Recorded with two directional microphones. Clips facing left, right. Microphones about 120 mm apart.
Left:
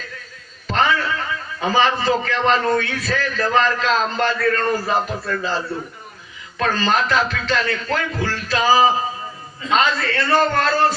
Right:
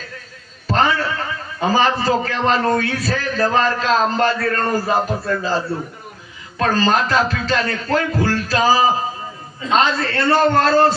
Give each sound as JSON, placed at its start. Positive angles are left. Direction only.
{"t": 0.7, "sound": "a sound", "side_deg": -35}
{"t": 1.7, "sound": "a man's voice", "side_deg": -40}
{"t": 6.6, "sound": "a man's voice", "side_deg": -40}